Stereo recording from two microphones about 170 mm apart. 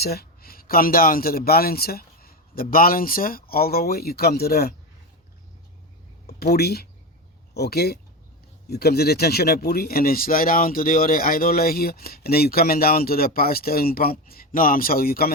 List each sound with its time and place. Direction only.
0.0 s speech: 65° left (ahead or behind)
6.2 s speech: 65° left (ahead or behind)